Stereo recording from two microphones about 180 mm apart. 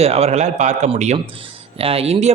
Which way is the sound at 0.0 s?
35° right (ahead or behind).